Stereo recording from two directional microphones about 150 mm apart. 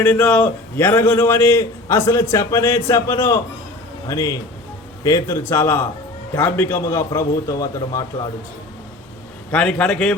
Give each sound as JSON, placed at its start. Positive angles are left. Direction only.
{"t": 0.0, "sound": "a man's voice", "side_deg": 10}
{"t": 9.5, "sound": "a man's voice", "side_deg": 5}